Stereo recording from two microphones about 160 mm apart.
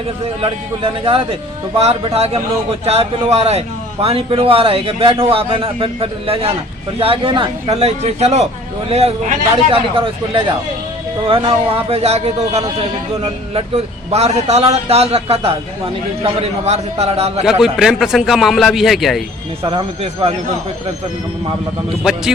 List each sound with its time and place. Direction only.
1.0 s a man's voice: 35° right (ahead or behind)
17.4 s a man's voice: 5° right (ahead or behind)
19.6 s a man's voice: 35° right (ahead or behind)